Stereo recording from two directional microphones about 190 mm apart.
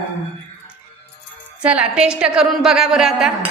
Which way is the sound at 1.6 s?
5° right (ahead or behind).